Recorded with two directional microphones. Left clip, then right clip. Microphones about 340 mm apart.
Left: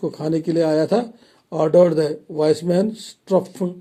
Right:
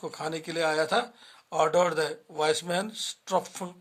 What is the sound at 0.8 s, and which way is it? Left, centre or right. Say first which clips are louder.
Speech: left 7 dB; centre.